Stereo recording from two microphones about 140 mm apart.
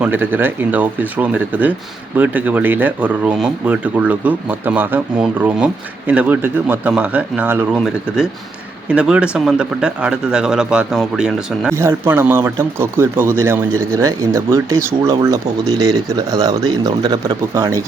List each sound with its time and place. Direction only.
0.0 s speech: 15° right (ahead or behind)
8.9 s speech: 10° right (ahead or behind)
11.7 s speech: 20° right (ahead or behind)